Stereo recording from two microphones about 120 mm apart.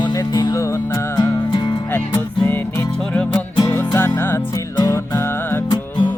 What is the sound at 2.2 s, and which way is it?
Music, 20° left (ahead or behind).